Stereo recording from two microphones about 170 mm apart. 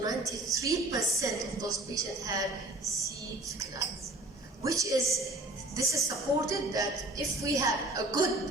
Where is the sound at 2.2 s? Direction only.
20° right (ahead or behind).